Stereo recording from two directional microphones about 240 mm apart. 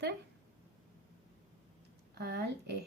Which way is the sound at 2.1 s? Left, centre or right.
Right.